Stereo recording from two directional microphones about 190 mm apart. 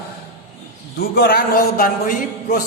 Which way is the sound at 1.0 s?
55° left (ahead or behind).